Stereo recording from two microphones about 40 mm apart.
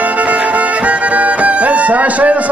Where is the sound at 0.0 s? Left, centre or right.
Right.